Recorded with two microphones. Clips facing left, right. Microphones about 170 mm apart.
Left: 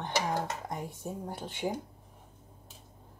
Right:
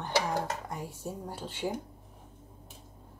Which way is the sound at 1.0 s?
15° left (ahead or behind).